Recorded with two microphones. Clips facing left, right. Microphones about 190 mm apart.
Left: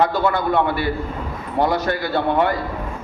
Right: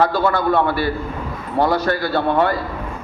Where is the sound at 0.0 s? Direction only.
20° left (ahead or behind).